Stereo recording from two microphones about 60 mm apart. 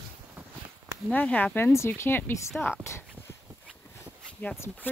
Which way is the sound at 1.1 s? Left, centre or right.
Left.